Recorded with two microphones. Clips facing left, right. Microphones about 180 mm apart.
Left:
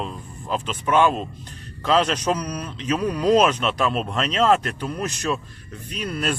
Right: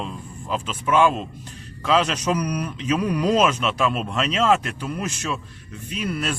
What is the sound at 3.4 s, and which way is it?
Speech, 5° right (ahead or behind).